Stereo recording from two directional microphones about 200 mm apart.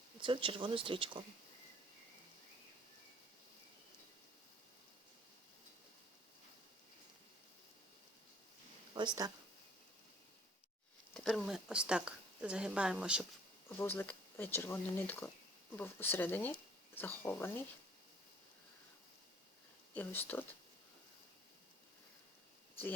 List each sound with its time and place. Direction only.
0.2 s speech: 25° right (ahead or behind)
9.0 s speech: 20° right (ahead or behind)
11.1 s speech: centre (ahead or behind)
13.7 s speech: 10° left (ahead or behind)
19.9 s speech: 10° left (ahead or behind)